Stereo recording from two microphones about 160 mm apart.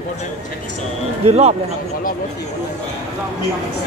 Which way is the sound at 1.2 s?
40° right (ahead or behind).